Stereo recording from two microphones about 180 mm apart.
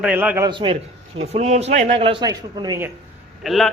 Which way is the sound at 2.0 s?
25° right (ahead or behind).